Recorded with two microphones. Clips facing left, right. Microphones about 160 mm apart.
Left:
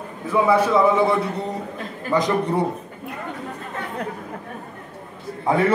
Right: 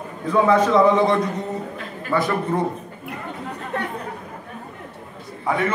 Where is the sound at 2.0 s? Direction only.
15° left (ahead or behind).